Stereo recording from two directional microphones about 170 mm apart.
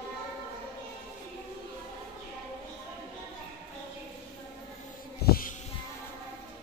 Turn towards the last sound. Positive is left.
turn(degrees=60)  # may be behind; listen again after turning